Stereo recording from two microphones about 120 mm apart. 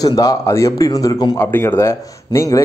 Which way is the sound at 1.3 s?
20° left (ahead or behind).